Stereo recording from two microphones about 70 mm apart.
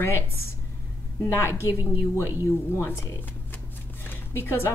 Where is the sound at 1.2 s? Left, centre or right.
Left.